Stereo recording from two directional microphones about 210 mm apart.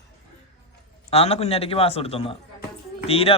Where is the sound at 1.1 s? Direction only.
30° left (ahead or behind).